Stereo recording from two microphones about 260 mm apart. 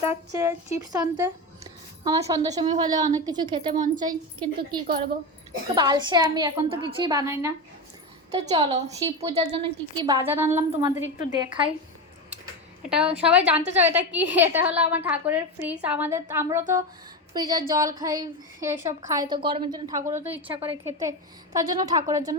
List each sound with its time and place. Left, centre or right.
0.3 s a woman's voice: centre
8.4 s a woman's voice: right
12.9 s a woman's voice: centre